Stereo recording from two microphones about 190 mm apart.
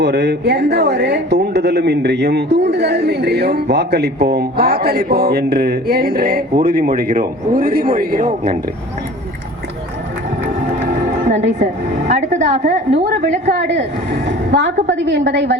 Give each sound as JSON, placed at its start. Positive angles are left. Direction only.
{"t": 0.0, "sound": "speech", "side_deg": -65}
{"t": 10.8, "sound": "speech", "side_deg": -40}
{"t": 14.8, "sound": "a woman's voice", "side_deg": -70}